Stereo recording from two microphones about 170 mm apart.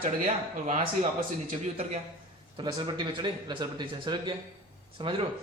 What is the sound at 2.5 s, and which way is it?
Speech, 25° right (ahead or behind).